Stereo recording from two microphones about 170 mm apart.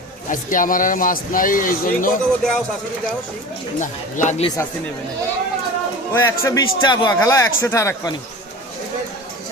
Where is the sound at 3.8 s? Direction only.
45° left (ahead or behind).